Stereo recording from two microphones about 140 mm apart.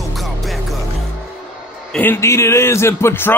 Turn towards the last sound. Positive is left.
turn(degrees=15)  # may be behind; listen again after turning